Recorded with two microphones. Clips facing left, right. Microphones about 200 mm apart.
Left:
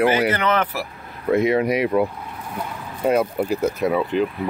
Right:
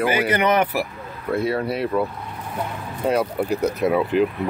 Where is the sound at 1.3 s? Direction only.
20° left (ahead or behind).